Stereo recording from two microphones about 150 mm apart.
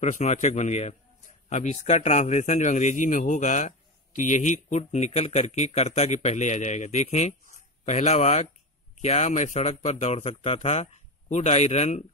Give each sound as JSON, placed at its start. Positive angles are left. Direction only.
{"t": 0.0, "sound": "a man's voice", "side_deg": 55}